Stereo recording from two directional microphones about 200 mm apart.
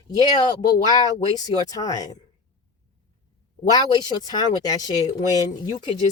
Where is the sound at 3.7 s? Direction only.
20° left (ahead or behind).